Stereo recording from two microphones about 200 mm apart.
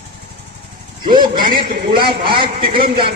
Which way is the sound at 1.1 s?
20° right (ahead or behind).